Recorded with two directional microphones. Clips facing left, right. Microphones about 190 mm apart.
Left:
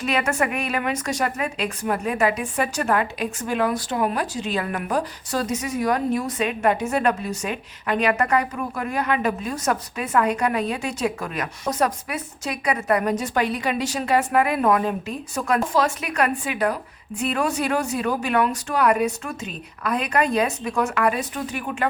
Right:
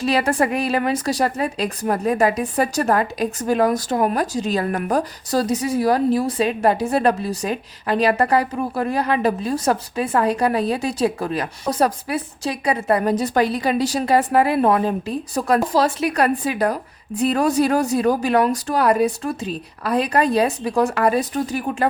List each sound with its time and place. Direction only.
0.0 s a woman's voice: 35° right (ahead or behind)